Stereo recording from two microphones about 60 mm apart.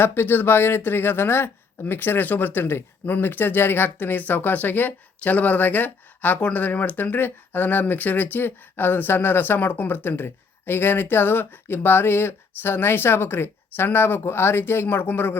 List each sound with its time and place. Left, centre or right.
0.0 s speech: left